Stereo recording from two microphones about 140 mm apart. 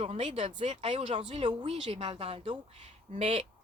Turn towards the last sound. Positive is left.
turn(degrees=-45)  # may be behind; listen again after turning